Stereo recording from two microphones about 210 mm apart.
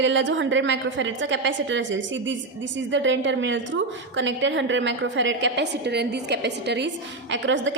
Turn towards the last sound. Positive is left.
turn(degrees=-60)  # may be behind; listen again after turning